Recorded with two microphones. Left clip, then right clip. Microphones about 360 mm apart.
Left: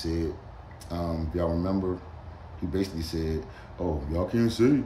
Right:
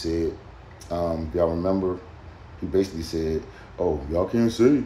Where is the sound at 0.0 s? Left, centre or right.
Centre.